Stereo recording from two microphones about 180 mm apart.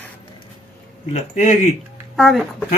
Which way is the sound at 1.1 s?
40° left (ahead or behind).